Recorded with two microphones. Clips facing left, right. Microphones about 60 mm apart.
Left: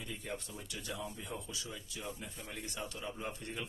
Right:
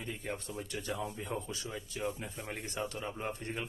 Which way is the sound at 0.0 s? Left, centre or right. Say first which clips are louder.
Right 3 dB; right.